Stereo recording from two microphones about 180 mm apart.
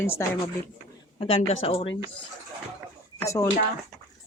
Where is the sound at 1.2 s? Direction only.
30° left (ahead or behind).